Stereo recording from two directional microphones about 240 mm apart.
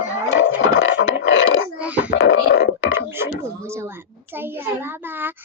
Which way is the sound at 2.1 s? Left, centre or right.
Left.